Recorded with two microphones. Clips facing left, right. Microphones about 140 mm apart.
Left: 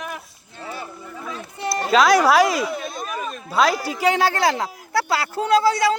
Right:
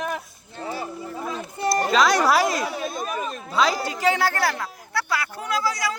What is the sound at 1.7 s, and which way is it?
Speech, centre (ahead or behind).